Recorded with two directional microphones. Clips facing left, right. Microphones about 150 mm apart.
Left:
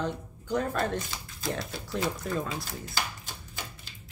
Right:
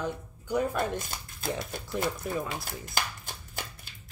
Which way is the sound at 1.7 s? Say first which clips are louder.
Even; 55° right (ahead or behind).